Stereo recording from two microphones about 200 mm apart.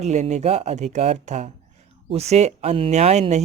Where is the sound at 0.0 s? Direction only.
35° right (ahead or behind).